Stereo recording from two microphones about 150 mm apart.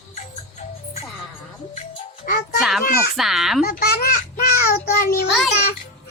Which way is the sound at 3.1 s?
Centre (ahead or behind).